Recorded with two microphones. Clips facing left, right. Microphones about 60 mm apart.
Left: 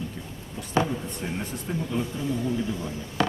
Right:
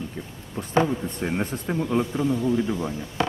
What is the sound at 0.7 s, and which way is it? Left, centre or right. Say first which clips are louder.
Speech: right 3 dB; right.